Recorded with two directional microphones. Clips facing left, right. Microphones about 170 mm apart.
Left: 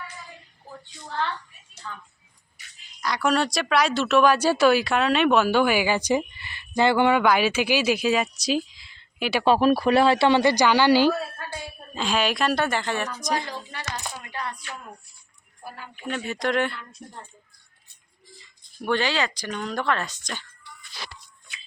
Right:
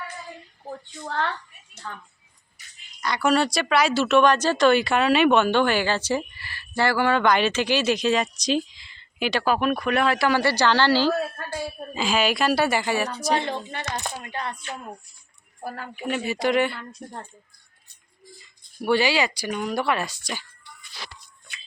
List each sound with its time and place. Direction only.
1.0 s a child's voice: 60° right (ahead or behind)
3.0 s speech: centre (ahead or behind); by 7.2 s 20° left (ahead or behind)
7.2 s speech: 5° left (ahead or behind)
9.4 s speech: 30° left (ahead or behind); by 11.1 s 15° left (ahead or behind)
11.9 s speech: centre (ahead or behind)
13.6 s a sound: 25° right (ahead or behind)
15.6 s speech: 50° right (ahead or behind)
16.0 s speech: 10° right (ahead or behind)
18.8 s speech: 10° right (ahead or behind)